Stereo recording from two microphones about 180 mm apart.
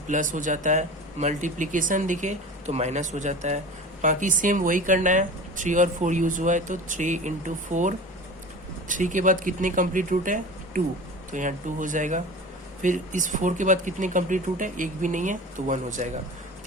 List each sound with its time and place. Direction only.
0.1 s speech: 45° right (ahead or behind)